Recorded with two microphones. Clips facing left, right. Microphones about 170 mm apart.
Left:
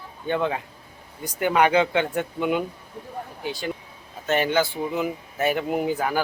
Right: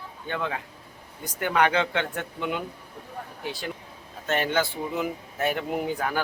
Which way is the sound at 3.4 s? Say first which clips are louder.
Left 4 dB; centre (ahead or behind).